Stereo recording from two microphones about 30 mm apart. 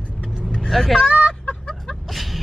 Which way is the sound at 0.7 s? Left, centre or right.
Centre.